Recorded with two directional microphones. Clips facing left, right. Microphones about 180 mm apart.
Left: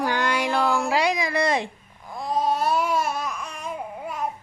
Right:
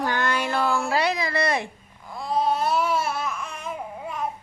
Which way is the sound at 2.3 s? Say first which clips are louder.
Even; 40° left (ahead or behind).